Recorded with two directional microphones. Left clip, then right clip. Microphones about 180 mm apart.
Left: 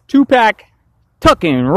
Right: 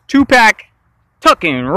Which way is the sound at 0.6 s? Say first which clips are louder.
Right 7 dB; 15° left (ahead or behind).